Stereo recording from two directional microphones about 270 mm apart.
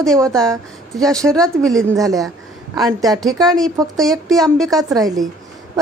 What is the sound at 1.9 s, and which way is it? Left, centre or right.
Speech, centre.